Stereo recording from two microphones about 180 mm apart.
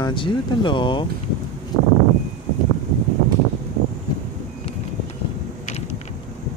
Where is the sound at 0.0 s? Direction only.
25° left (ahead or behind).